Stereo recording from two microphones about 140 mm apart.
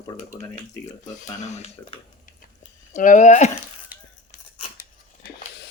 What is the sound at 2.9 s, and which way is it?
Speech, 65° left (ahead or behind).